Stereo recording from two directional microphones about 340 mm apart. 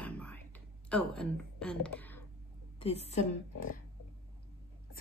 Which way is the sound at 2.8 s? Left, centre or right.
Centre.